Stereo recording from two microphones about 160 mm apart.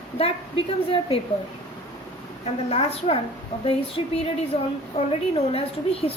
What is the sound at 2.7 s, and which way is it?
A woman's voice, 40° left (ahead or behind).